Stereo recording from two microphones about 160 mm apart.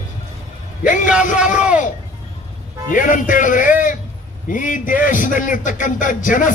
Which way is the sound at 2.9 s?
55° left (ahead or behind).